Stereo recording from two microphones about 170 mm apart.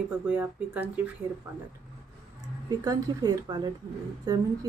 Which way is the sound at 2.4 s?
20° right (ahead or behind).